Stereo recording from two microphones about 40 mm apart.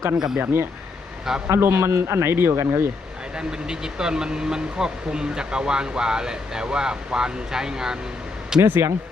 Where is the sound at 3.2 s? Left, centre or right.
Centre.